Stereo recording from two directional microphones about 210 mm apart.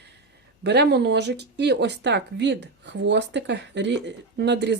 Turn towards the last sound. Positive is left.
turn(degrees=-55)  # may be behind; listen again after turning